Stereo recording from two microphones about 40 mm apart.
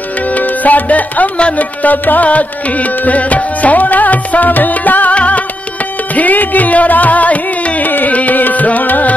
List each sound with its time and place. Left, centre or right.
0.3 s music: left
5.1 s music: left
6.1 s music: left